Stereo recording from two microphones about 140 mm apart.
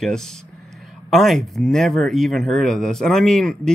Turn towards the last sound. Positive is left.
turn(degrees=5)  # may be behind; listen again after turning